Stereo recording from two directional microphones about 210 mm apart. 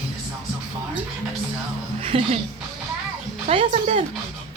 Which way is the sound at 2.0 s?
30° right (ahead or behind).